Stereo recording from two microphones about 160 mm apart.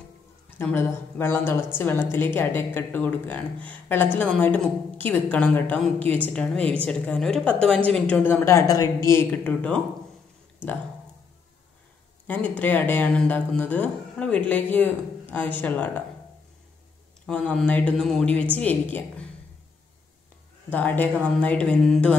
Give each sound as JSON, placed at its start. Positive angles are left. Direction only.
{"t": 0.6, "sound": "a woman's voice", "side_deg": 15}
{"t": 12.4, "sound": "a woman's voice", "side_deg": 10}
{"t": 17.3, "sound": "a woman's voice", "side_deg": 10}
{"t": 20.7, "sound": "a woman's voice", "side_deg": 10}